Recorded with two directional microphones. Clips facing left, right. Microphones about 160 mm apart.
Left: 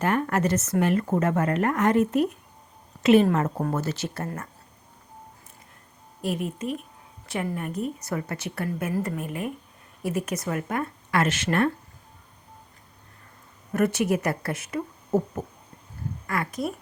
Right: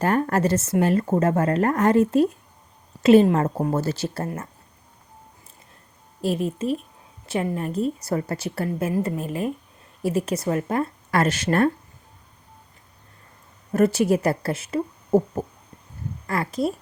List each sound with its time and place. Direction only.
0.0 s a woman's voice: 35° right (ahead or behind)
6.2 s a woman's voice: 30° right (ahead or behind)
13.7 s a woman's voice: 30° right (ahead or behind)
16.2 s a woman's voice: 30° right (ahead or behind)